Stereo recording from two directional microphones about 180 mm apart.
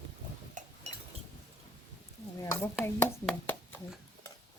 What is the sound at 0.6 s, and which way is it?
Chink, 45° right (ahead or behind).